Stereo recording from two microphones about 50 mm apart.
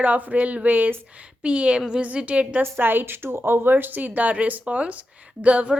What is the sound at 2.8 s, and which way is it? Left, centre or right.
Speech, right.